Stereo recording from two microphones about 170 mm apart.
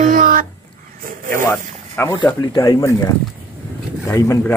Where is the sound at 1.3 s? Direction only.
15° left (ahead or behind).